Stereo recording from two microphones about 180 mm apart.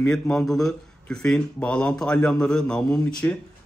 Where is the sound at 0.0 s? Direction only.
5° left (ahead or behind).